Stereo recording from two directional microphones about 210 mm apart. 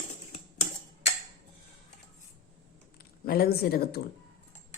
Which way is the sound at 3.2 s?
45° left (ahead or behind).